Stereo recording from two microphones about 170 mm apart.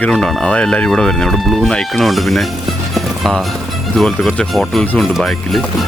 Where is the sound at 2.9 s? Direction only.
Centre (ahead or behind).